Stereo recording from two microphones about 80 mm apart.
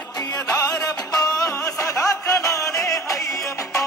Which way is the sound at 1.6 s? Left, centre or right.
Left.